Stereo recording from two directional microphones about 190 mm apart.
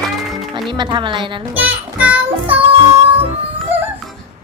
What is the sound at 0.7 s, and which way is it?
Speech, 25° right (ahead or behind).